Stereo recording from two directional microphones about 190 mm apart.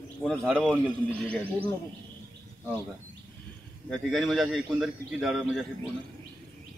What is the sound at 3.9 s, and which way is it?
A man's voice, centre (ahead or behind).